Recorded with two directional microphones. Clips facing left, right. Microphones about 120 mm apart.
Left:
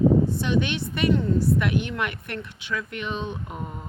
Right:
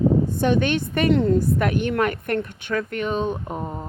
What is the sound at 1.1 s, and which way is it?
Speech, 70° right (ahead or behind).